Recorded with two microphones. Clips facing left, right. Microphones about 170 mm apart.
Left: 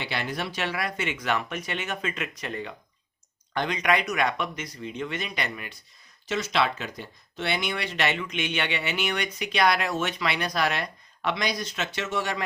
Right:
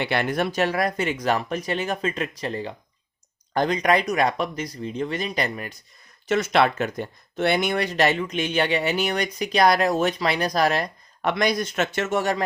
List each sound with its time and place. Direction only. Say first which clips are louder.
0.0 s speech: right 8 dB; 55° right (ahead or behind); by 5.7 s 40° right (ahead or behind)
6.2 s speech: right 6 dB; 55° right (ahead or behind)